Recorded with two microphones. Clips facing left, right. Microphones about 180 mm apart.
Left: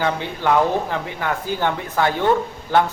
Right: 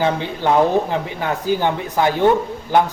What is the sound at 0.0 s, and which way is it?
Speech, 25° right (ahead or behind).